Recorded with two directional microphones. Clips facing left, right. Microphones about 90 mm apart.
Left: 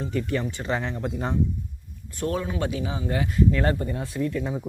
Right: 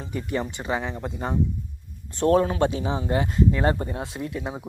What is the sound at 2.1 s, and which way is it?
Speech, 40° right (ahead or behind).